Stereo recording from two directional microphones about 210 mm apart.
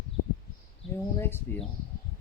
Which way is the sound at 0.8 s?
25° left (ahead or behind).